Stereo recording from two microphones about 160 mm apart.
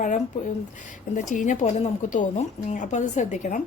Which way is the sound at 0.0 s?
50° left (ahead or behind).